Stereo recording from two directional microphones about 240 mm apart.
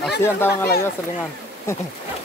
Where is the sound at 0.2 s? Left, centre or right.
Centre.